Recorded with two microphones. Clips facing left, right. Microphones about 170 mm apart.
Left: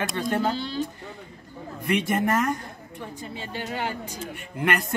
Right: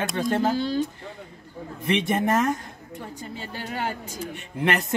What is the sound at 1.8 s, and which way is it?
Speech, 25° right (ahead or behind).